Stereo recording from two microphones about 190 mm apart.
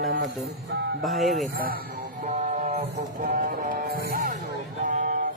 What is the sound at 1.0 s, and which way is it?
Speech, centre (ahead or behind).